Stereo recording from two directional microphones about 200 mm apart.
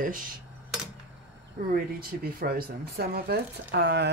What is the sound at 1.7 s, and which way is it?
A woman's voice, 45° right (ahead or behind).